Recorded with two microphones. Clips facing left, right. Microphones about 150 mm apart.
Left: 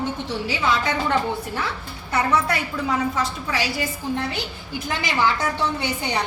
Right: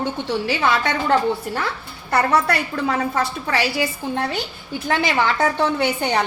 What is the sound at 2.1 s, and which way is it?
A woman's voice, 65° right (ahead or behind).